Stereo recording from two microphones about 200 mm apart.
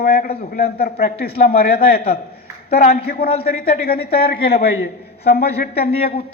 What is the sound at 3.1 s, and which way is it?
A man's voice, 50° left (ahead or behind).